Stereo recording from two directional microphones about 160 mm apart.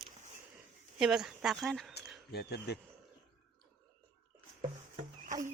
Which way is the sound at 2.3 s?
85° left.